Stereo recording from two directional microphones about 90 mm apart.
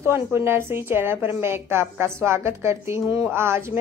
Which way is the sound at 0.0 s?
30° right (ahead or behind).